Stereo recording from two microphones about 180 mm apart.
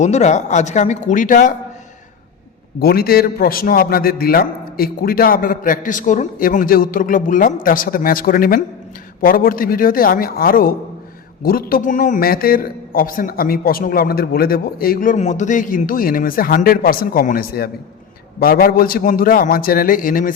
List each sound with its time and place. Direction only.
0.0 s speech: 40° left (ahead or behind)
2.8 s a man's voice: 60° left (ahead or behind)